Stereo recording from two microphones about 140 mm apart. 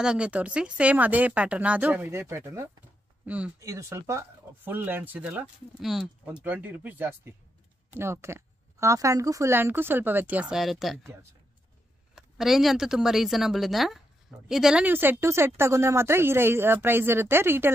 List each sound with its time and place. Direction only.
0.0 s a woman's voice: 5° right (ahead or behind)
3.3 s a woman's voice: 10° right (ahead or behind)
3.5 s a woman's voice: 20° right (ahead or behind); by 11.0 s centre (ahead or behind)
12.2 s a woman's voice: centre (ahead or behind)